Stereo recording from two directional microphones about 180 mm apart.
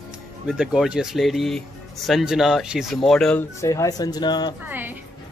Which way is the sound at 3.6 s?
15° left (ahead or behind).